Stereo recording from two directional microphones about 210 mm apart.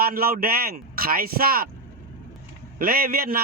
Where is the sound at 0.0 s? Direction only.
45° right (ahead or behind).